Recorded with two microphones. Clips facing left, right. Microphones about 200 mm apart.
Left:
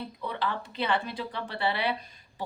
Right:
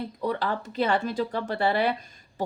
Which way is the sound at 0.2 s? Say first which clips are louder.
Right 5 dB; 45° right (ahead or behind).